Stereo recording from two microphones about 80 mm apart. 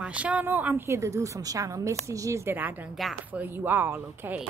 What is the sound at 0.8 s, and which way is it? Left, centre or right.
A woman's voice, right.